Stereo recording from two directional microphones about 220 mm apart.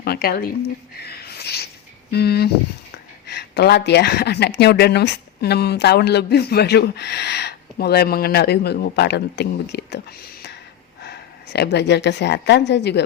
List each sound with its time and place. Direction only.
0.0 s a woman's voice: 45° left (ahead or behind)
1.0 s a sound: 45° left (ahead or behind)
2.0 s a woman's voice: 45° left (ahead or behind)
11.0 s a woman's voice: 50° left (ahead or behind)